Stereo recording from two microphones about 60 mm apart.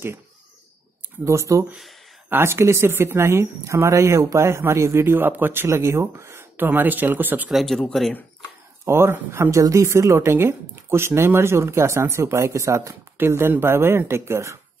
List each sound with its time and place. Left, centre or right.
1.2 s speech: right
2.2 s speech: right
5.7 s speech: right
6.5 s speech: right
7.5 s speech: centre
8.8 s speech: right
9.6 s speech: right
13.2 s speech: right